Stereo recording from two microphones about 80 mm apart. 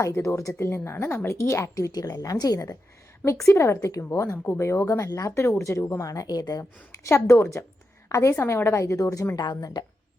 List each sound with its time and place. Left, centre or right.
0.0 s a woman's voice: left
1.9 s a woman's voice: left
3.4 s a woman's voice: left
6.1 s a woman's voice: left